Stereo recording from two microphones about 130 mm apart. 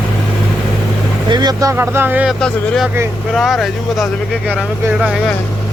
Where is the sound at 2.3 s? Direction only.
Centre (ahead or behind).